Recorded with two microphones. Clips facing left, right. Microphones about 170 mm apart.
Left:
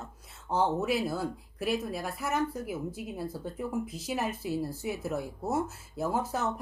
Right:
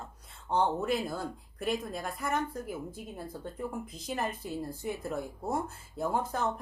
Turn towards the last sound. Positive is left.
turn(degrees=5)  # may be behind; listen again after turning